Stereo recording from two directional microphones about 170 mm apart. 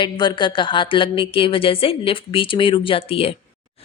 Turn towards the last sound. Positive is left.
turn(degrees=35)  # may be behind; listen again after turning